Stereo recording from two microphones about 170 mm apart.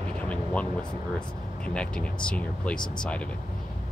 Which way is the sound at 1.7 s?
5° left (ahead or behind).